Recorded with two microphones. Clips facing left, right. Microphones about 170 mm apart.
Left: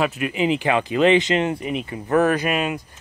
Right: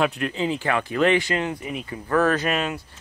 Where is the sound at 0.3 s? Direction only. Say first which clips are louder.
Left 4 dB; 15° left (ahead or behind).